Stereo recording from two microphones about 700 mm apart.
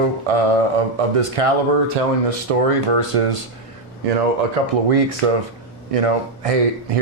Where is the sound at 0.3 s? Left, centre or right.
Right.